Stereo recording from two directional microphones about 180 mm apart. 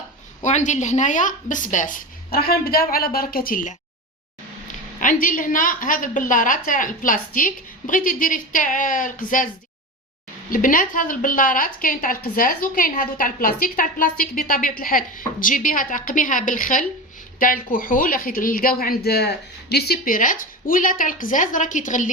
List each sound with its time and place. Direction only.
0.4 s a woman's voice: 40° left (ahead or behind)
10.5 s a woman's voice: 50° left (ahead or behind)